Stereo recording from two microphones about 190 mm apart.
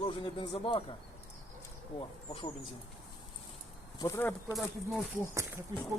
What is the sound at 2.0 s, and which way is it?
Speech, 30° left (ahead or behind).